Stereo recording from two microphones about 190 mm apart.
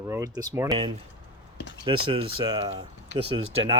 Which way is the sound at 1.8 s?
25° right (ahead or behind).